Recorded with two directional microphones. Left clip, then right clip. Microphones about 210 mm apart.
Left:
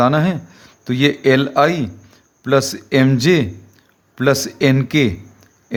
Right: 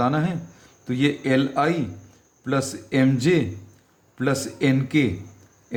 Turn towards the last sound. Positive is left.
turn(degrees=45)  # may be behind; listen again after turning